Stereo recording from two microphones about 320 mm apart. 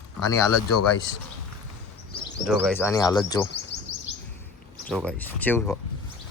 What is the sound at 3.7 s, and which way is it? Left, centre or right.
Chirp, left.